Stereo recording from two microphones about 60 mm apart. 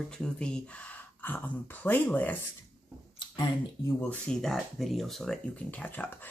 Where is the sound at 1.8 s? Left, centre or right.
Left.